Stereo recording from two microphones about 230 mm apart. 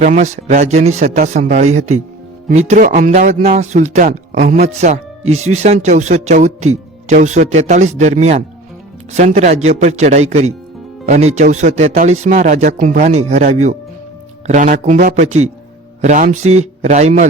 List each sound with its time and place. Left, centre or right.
0.0 s speech: right
16.4 s speech: right
16.8 s speech: right